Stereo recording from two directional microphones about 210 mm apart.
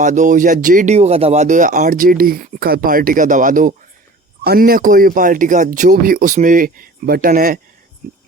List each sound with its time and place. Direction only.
0.0 s speech: 35° right (ahead or behind)